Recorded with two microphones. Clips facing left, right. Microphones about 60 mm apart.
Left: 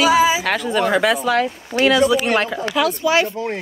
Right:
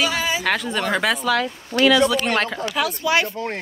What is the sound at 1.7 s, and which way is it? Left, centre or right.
Speech, right.